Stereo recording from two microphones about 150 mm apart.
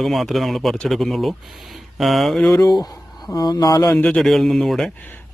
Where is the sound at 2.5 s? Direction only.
25° left (ahead or behind).